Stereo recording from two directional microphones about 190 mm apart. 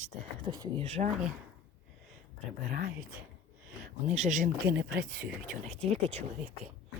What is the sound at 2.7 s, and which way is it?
Speech, 55° right (ahead or behind).